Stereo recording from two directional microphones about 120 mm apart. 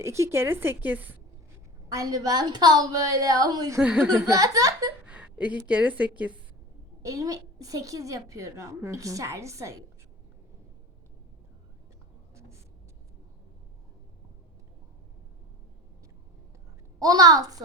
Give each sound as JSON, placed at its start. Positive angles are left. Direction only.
{"t": 0.0, "sound": "a woman's voice", "side_deg": -25}
{"t": 1.9, "sound": "a woman's voice", "side_deg": -30}
{"t": 3.8, "sound": "a woman's voice", "side_deg": -10}
{"t": 4.3, "sound": "a woman's voice", "side_deg": -30}
{"t": 5.0, "sound": "a woman's voice", "side_deg": -10}
{"t": 7.0, "sound": "a woman's voice", "side_deg": -30}
{"t": 12.3, "sound": "writing", "side_deg": -25}
{"t": 17.0, "sound": "a woman's voice", "side_deg": -30}